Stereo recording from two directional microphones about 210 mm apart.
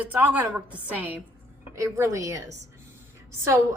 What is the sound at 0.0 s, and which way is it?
A woman's voice, 5° right (ahead or behind).